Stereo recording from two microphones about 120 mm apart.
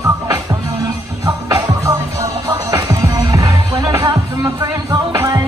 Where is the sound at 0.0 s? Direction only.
25° right (ahead or behind).